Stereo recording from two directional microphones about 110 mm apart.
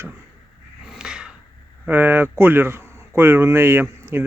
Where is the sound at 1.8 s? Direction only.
20° right (ahead or behind).